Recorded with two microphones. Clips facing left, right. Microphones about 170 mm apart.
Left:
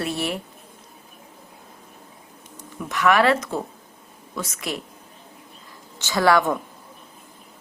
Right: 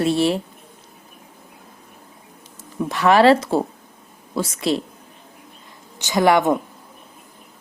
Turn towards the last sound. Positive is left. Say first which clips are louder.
# right 3 dB
turn(degrees=-20)  # may be behind; listen again after turning